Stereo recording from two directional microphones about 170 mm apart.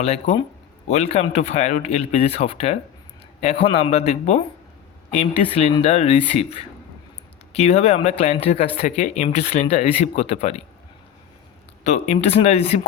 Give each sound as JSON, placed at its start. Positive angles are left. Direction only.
{"t": 0.9, "sound": "speech", "side_deg": 40}
{"t": 11.8, "sound": "speech", "side_deg": 40}